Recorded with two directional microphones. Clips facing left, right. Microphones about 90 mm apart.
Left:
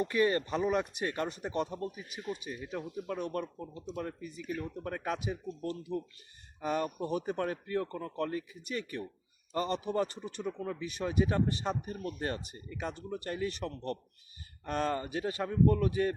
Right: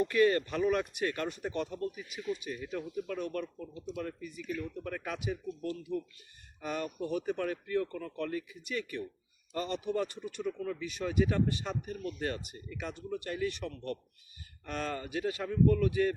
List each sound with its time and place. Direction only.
0.1 s speech: 25° left (ahead or behind)
2.4 s speech: 20° left (ahead or behind)
3.6 s speech: 35° left (ahead or behind)
12.2 s speech: 35° left (ahead or behind)